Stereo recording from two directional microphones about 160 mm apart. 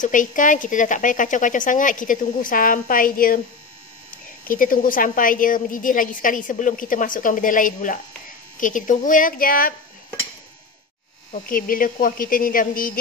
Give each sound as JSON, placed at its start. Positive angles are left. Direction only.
{"t": 0.0, "sound": "a woman's voice", "side_deg": 55}
{"t": 4.5, "sound": "a woman's voice", "side_deg": 60}
{"t": 11.3, "sound": "a woman's voice", "side_deg": 60}